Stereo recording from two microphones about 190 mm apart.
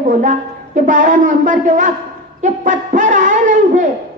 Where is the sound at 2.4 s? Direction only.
40° right (ahead or behind).